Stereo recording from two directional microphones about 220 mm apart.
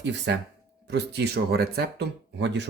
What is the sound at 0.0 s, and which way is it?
Speech, 50° right (ahead or behind).